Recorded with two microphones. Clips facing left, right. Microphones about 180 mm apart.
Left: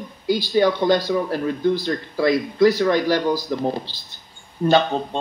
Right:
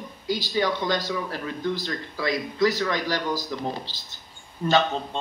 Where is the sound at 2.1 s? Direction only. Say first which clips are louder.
Left 8 dB; 55° left (ahead or behind).